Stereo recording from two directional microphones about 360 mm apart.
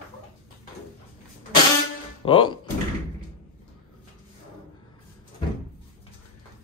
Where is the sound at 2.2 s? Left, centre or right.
Centre.